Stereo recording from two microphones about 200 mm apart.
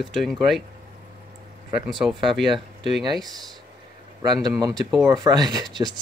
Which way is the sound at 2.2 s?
25° right (ahead or behind).